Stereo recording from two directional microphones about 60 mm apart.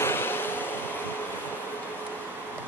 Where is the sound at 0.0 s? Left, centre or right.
Left.